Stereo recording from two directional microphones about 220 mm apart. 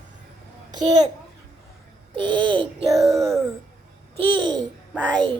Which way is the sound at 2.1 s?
20° right (ahead or behind).